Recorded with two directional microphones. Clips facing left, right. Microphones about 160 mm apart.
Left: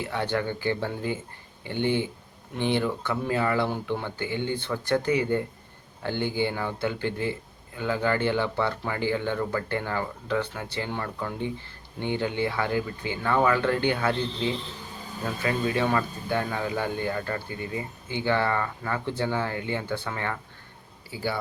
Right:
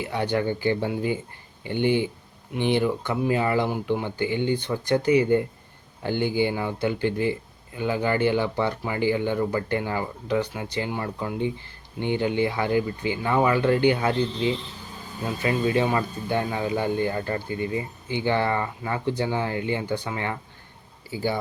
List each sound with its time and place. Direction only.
0.0 s speech: 15° right (ahead or behind)
15.4 s speech: 20° right (ahead or behind)